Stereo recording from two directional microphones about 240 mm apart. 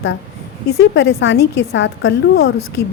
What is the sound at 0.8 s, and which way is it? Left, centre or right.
A woman's voice, left.